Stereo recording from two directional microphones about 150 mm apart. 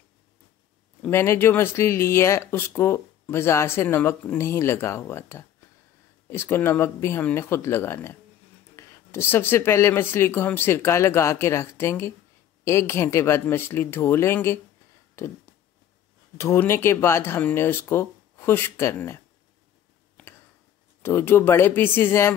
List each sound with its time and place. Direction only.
1.0 s speech: 15° left (ahead or behind)
15.1 s a sound: 15° left (ahead or behind)
16.3 s speech: 20° left (ahead or behind)
21.0 s speech: 15° left (ahead or behind)